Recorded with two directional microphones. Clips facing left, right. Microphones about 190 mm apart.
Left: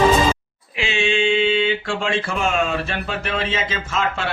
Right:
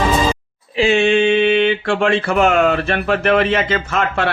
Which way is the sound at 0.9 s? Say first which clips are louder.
Right 6 dB; 60° right (ahead or behind).